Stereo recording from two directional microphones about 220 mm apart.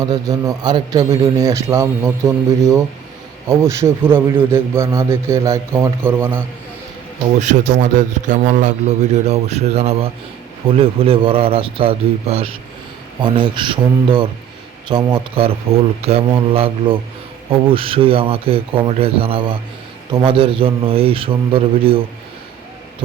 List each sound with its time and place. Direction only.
0.0 s a man's voice: 15° right (ahead or behind)
7.3 s a man's voice: 35° right (ahead or behind)